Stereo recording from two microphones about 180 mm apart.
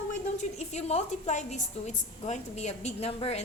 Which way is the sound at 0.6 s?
35° left (ahead or behind).